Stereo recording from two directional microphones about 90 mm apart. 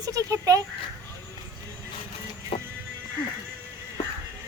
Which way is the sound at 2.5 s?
80° left.